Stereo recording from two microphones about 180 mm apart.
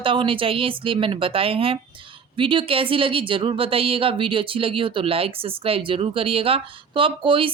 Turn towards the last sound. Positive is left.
turn(degrees=-30)  # may be behind; listen again after turning